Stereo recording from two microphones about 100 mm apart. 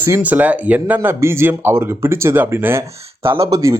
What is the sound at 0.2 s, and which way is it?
A man's voice, 15° right (ahead or behind).